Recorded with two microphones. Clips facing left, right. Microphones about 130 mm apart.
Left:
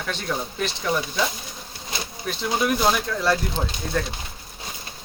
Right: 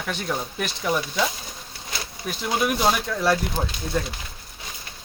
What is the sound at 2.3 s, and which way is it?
Speech, 10° right (ahead or behind).